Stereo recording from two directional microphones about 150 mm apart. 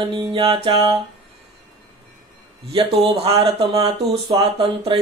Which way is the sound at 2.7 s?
40° right (ahead or behind).